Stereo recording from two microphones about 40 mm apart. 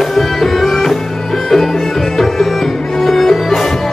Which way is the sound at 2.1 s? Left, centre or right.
Centre.